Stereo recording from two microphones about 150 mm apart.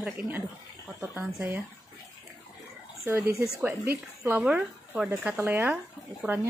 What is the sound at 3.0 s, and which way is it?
Speech, 20° right (ahead or behind).